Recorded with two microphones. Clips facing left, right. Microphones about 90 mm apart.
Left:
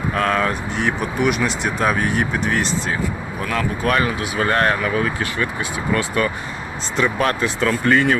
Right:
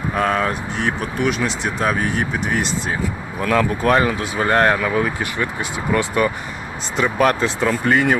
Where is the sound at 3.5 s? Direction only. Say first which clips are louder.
Right 3 dB; 30° right (ahead or behind).